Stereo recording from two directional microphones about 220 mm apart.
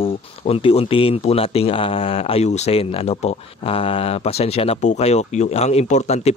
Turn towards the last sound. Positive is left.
turn(degrees=30)  # may be behind; listen again after turning